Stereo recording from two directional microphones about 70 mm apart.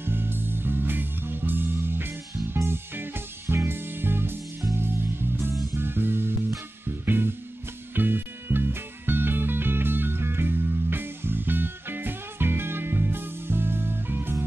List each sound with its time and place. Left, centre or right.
0.0 s music: right
5.8 s music: right